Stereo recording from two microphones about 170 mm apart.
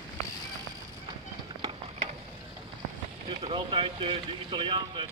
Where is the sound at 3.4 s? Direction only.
30° right (ahead or behind).